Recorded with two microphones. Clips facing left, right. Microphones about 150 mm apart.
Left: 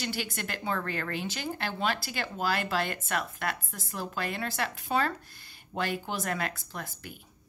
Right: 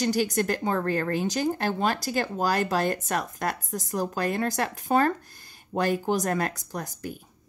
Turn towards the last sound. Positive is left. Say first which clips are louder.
# right 7 dB
turn(degrees=-40)  # may be behind; listen again after turning